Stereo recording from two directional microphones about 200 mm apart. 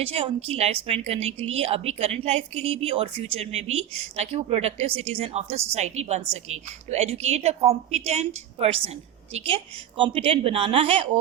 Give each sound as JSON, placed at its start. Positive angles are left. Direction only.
{"t": 0.0, "sound": "a woman's voice", "side_deg": -30}